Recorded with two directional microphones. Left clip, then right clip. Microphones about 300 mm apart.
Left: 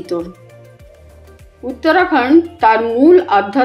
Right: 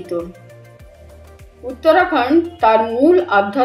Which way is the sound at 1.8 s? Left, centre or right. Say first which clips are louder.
Left 1 dB; left.